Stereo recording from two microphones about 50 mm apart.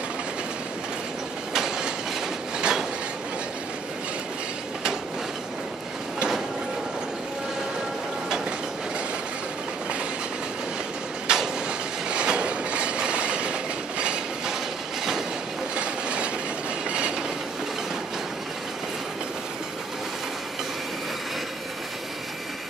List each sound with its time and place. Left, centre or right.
1.5 s train: centre
11.2 s a sound: centre
12.1 s train: right
15.7 s train: right